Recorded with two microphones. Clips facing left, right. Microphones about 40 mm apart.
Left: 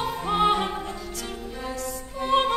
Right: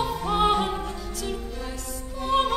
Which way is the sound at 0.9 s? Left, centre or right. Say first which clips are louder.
Right 2 dB; centre.